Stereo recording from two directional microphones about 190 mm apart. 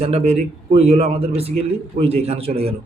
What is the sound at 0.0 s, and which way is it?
Speech, 35° right (ahead or behind).